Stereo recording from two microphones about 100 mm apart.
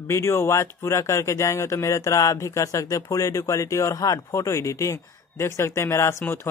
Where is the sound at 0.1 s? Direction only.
25° left (ahead or behind).